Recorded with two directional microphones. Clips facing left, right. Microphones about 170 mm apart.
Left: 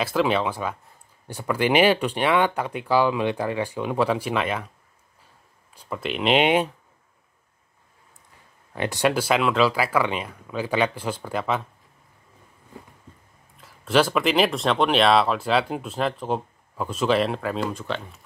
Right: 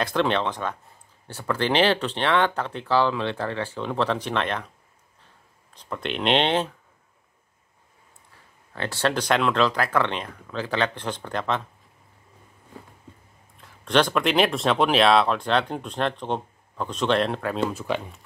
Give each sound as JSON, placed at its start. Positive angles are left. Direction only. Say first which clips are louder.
{"t": 0.0, "sound": "speech", "louder": "left 1 dB", "side_deg": 5}
{"t": 5.7, "sound": "speech", "louder": "left 1 dB", "side_deg": 5}
{"t": 8.7, "sound": "speech", "louder": "left 3 dB", "side_deg": 15}
{"t": 13.6, "sound": "speech", "louder": "left 1 dB", "side_deg": 5}